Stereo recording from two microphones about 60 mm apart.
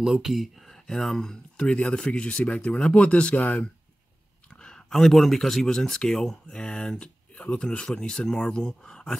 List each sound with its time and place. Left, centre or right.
0.0 s speech: centre